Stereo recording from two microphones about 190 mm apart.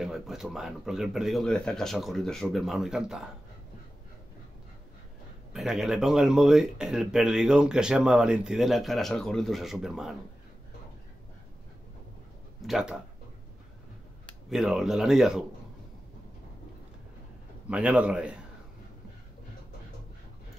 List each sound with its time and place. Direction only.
0.0 s speech: centre (ahead or behind)
5.5 s speech: centre (ahead or behind)
12.6 s speech: 5° right (ahead or behind)
14.5 s speech: centre (ahead or behind)
17.6 s speech: 5° right (ahead or behind)